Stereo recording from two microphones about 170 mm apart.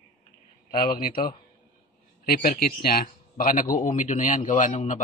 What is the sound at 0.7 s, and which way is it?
Speech, 60° left (ahead or behind).